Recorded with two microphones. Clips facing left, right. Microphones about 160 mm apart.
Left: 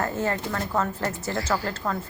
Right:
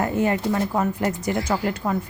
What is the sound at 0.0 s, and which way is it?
Speech, 15° right (ahead or behind).